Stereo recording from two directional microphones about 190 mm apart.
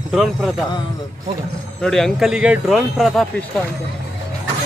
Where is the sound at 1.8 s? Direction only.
5° left (ahead or behind).